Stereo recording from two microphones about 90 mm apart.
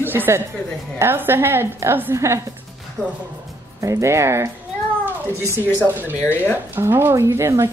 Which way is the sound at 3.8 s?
35° right (ahead or behind).